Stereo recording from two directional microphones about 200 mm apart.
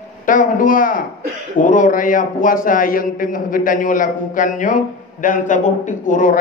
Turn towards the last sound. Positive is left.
turn(degrees=40)  # may be behind; listen again after turning